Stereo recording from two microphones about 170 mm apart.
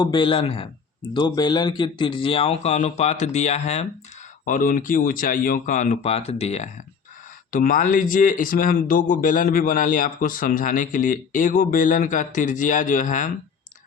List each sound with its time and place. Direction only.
0.0 s speech: 30° left (ahead or behind)
4.4 s speech: 55° left (ahead or behind)
7.5 s speech: 55° left (ahead or behind)